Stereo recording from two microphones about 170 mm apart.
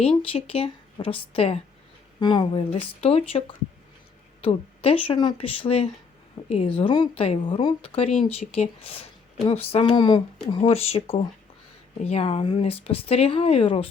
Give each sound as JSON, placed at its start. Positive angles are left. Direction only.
{"t": 0.3, "sound": "a woman's voice", "side_deg": 35}